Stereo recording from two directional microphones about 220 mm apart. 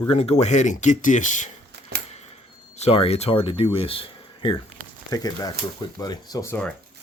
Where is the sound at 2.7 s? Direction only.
30° left (ahead or behind); by 6.7 s 10° left (ahead or behind).